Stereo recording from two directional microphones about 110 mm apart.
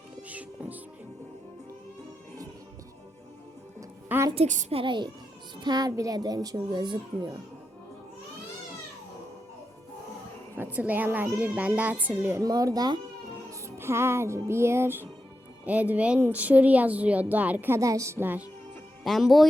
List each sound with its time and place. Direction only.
0.2 s music: 15° right (ahead or behind)
4.4 s a woman's voice: 80° right
4.8 s a child's voice: 45° right (ahead or behind)
10.6 s speech: 15° right (ahead or behind)
12.4 s a child's voice: 35° right (ahead or behind)
13.5 s music: 25° right (ahead or behind)
15.6 s speech: 15° right (ahead or behind)
17.7 s a woman's voice: 30° right (ahead or behind)
19.0 s speech: centre (ahead or behind)